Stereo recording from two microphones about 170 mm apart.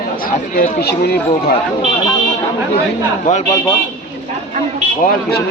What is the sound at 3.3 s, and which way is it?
Speech, 45° left (ahead or behind).